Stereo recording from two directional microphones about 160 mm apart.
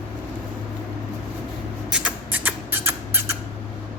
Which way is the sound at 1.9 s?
5° right (ahead or behind).